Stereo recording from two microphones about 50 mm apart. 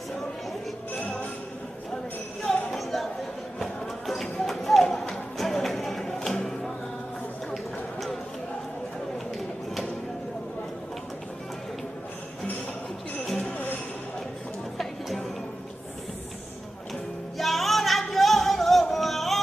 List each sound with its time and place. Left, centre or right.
2.4 s a sound: centre
3.5 s music: centre
7.5 s a sound: centre
13.4 s music: left
14.8 s music: centre
17.4 s music: centre